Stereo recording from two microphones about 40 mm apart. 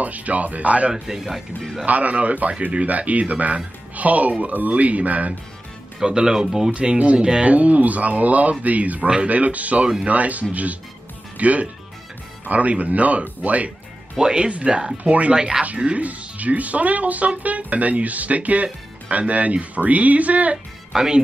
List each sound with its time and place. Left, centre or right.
0.0 s speech: right
0.9 s speech: centre
1.9 s speech: right
6.0 s speech: centre
6.7 s speech: right
7.4 s speech: right
14.2 s speech: right
15.3 s speech: right
15.6 s speech: right
20.9 s speech: centre